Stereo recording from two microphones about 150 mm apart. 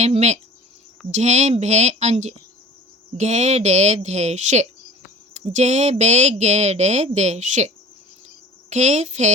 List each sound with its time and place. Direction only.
0.0 s speech: 45° right (ahead or behind)
8.7 s speech: 50° right (ahead or behind)